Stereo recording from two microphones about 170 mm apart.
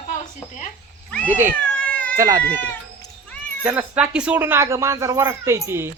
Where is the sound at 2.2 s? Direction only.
20° right (ahead or behind).